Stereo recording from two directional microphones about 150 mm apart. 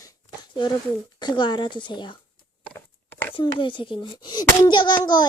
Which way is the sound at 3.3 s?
35° left (ahead or behind).